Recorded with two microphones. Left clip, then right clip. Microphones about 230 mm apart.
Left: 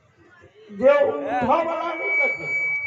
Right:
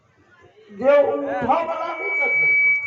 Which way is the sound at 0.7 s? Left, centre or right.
Left.